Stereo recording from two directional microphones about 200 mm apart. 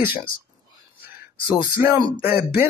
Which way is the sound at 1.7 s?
15° right (ahead or behind).